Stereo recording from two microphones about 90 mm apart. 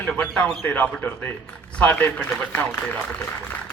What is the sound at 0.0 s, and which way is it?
Speech, 10° left (ahead or behind).